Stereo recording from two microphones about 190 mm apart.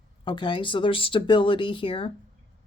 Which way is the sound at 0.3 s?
25° left (ahead or behind).